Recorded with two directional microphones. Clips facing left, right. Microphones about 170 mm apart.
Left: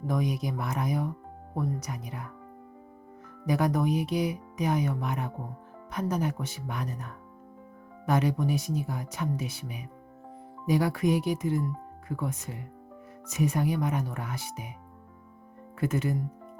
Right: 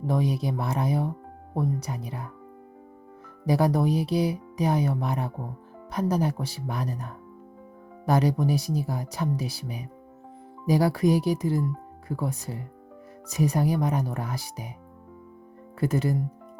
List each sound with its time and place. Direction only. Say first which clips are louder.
0.1 s speech: right 3 dB; 30° right (ahead or behind)
3.4 s speech: right 3 dB; 30° right (ahead or behind)
15.8 s speech: right 3 dB; 35° right (ahead or behind)